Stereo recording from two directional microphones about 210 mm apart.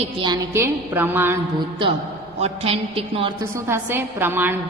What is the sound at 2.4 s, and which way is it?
Speech, 30° right (ahead or behind).